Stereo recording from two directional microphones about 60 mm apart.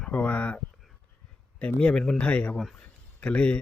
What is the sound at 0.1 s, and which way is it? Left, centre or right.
Speech, left.